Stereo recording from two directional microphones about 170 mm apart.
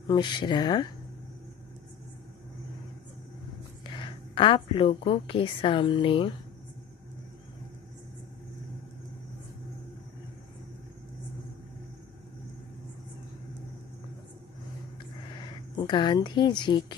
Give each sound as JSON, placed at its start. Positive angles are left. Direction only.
{"t": 0.0, "sound": "speech", "side_deg": 25}
{"t": 3.9, "sound": "a woman's voice", "side_deg": 30}
{"t": 15.4, "sound": "speech", "side_deg": 30}